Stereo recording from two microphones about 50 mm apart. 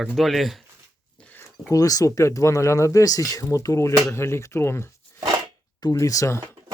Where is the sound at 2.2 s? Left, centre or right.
Left.